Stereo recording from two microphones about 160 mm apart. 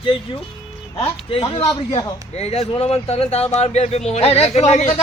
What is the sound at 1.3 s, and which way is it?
A man's voice, 35° left (ahead or behind).